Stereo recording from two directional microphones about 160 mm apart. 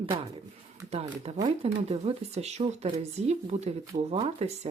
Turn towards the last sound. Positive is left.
turn(degrees=-40)  # may be behind; listen again after turning